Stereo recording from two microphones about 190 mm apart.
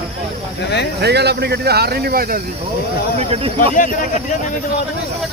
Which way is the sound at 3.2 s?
30° right (ahead or behind).